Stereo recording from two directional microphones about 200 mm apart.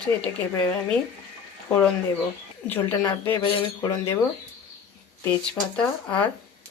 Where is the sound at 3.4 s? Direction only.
25° left (ahead or behind).